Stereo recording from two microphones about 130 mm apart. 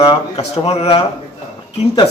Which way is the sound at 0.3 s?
50° left (ahead or behind).